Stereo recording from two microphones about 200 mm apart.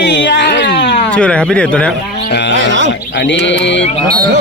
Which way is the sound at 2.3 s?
60° left (ahead or behind).